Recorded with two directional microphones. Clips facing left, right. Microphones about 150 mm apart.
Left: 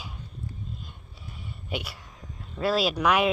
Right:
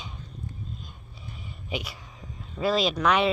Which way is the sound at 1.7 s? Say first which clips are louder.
Right 1 dB; centre (ahead or behind).